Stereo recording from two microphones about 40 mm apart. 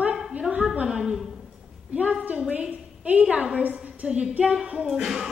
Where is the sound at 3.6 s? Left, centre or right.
Right.